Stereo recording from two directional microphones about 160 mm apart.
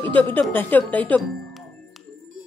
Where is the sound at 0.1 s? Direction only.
10° left (ahead or behind).